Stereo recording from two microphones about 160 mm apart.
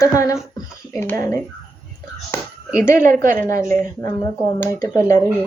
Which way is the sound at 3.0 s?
15° left (ahead or behind).